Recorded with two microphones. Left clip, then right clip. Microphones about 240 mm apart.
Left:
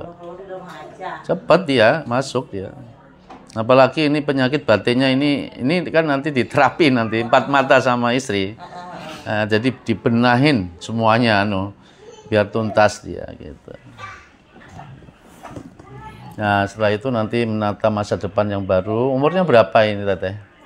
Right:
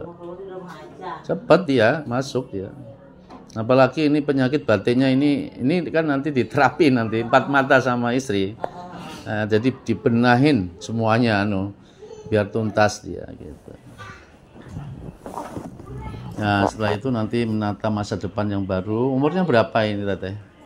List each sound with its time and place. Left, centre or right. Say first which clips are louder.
1.2 s a man's voice: left 2 dB; left
16.3 s a man's voice: left 3 dB; left